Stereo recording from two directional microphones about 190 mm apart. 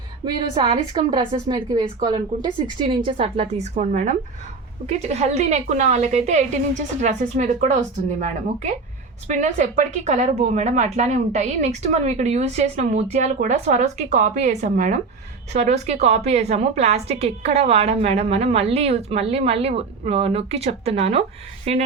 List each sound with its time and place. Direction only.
0.5 s a woman's voice: 25° right (ahead or behind)